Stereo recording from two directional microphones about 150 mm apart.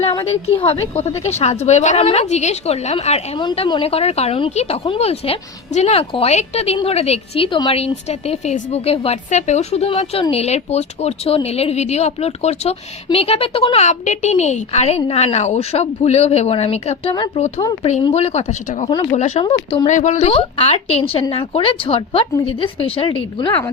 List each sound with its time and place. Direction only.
0.3 s a woman's voice: 40° left (ahead or behind)
19.9 s speech: 55° left (ahead or behind); by 23.6 s 35° left (ahead or behind)